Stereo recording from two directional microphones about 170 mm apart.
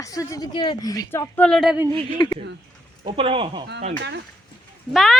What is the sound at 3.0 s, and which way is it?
Speech, 35° right (ahead or behind).